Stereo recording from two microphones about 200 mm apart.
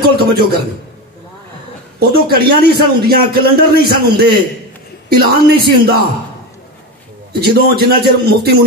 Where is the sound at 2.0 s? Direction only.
50° right (ahead or behind).